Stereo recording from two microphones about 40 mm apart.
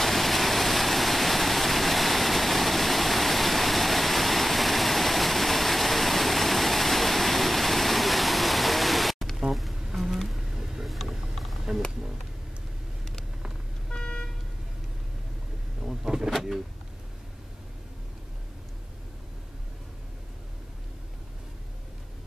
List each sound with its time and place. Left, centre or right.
0.0 s waterfall: centre
9.5 s bee: centre
9.8 s insect: centre
10.2 s bee: centre
10.9 s mechanisms: centre
11.7 s a sound: centre
13.8 s vehicle: left
15.8 s vehicle: centre
16.3 s a sound: centre